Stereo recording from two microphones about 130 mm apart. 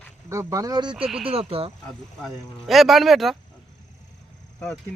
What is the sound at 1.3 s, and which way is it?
Speech, 50° right (ahead or behind).